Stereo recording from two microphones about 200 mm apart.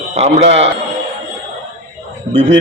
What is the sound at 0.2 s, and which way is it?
Speech, 30° right (ahead or behind).